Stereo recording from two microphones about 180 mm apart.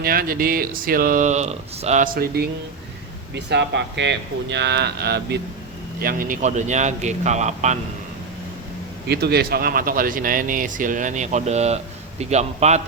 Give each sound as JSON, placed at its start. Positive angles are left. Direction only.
{"t": 0.0, "sound": "speech", "side_deg": -55}
{"t": 2.1, "sound": "speech", "side_deg": -60}
{"t": 3.3, "sound": "speech", "side_deg": -70}
{"t": 6.0, "sound": "a man's voice", "side_deg": -50}
{"t": 9.0, "sound": "a man's voice", "side_deg": -65}